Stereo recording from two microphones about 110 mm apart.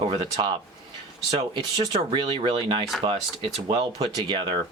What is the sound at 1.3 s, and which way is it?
Speech, 60° right (ahead or behind).